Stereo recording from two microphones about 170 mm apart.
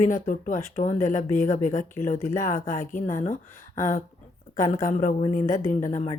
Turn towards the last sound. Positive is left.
turn(degrees=40)  # may be behind; listen again after turning